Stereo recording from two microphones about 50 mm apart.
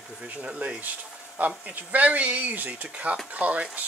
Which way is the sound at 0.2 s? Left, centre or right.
Centre.